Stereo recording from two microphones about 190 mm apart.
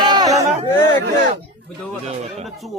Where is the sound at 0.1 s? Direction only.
20° right (ahead or behind).